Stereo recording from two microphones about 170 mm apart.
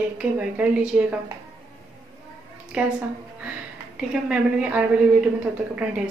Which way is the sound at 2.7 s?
10° right (ahead or behind).